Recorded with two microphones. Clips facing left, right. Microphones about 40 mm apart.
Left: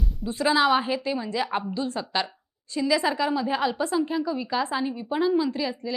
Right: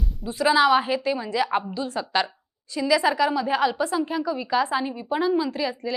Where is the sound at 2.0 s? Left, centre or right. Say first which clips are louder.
Right 2 dB; centre.